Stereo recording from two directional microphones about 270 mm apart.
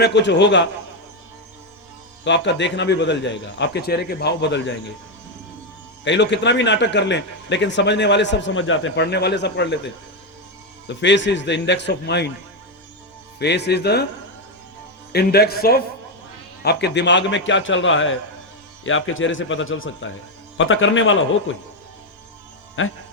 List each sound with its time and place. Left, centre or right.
0.0 s a man's voice: left
2.2 s a man's voice: left
6.1 s a man's voice: left
10.8 s a man's voice: left
13.4 s a man's voice: left
15.1 s a man's voice: left
22.8 s a man's voice: left